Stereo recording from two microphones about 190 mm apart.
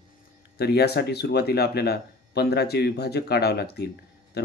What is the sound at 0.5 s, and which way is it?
Speech, 55° left (ahead or behind).